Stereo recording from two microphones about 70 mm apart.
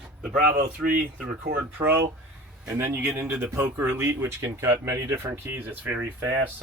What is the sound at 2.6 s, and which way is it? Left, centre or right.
Speech, right.